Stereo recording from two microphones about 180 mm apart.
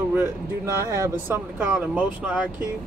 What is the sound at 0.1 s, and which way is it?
Speech, 15° right (ahead or behind).